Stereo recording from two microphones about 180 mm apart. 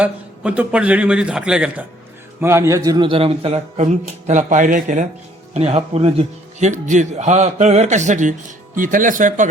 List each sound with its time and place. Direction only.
0.0 s a man's voice: 5° right (ahead or behind); by 9.5 s 45° right (ahead or behind)